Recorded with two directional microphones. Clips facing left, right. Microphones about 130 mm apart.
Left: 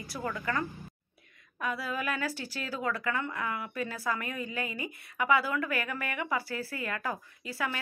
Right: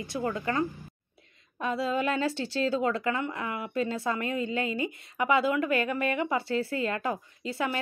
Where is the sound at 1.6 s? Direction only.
25° right (ahead or behind).